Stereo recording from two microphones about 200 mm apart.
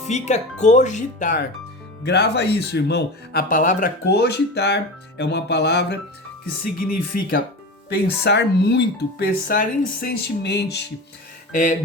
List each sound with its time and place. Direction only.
0.1 s speech: 35° left (ahead or behind)
2.0 s speech: 55° left (ahead or behind)
6.7 s speech: 45° left (ahead or behind)
11.5 s speech: 40° left (ahead or behind)